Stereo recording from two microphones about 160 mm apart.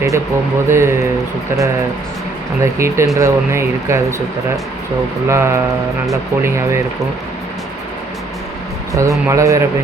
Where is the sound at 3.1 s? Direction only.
15° right (ahead or behind).